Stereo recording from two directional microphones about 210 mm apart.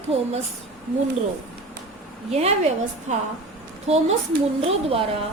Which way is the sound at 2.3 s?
30° right (ahead or behind).